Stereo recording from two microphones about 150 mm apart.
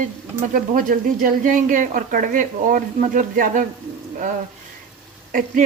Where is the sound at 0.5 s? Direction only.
65° right (ahead or behind).